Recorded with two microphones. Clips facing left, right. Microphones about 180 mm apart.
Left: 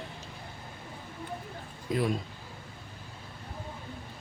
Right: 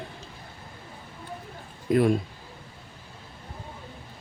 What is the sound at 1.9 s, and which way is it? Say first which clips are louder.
Speech: right 8 dB; 55° right (ahead or behind).